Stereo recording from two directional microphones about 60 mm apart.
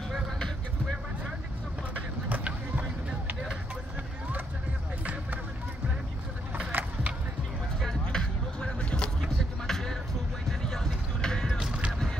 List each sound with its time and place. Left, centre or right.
2.2 s a sound: right
6.7 s skateboard: right
7.8 s vehicle: centre
9.7 s music: centre
10.6 s basketball bounce: centre
11.5 s music: centre